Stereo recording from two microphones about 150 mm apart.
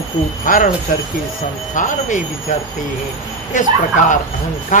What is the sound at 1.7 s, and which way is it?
Speech, 55° left (ahead or behind).